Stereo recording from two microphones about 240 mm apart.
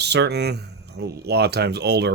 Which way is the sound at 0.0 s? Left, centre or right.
Right.